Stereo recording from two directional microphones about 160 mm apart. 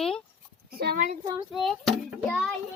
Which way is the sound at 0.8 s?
65° right (ahead or behind).